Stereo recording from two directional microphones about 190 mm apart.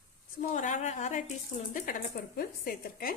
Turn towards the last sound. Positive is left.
turn(degrees=50)  # may be behind; listen again after turning